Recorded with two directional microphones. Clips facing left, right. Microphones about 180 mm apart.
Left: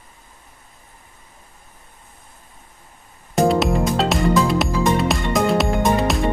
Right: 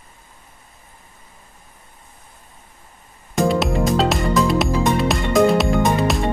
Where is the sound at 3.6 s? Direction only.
Centre (ahead or behind).